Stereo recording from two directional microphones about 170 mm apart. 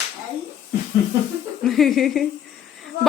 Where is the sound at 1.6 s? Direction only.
Centre (ahead or behind).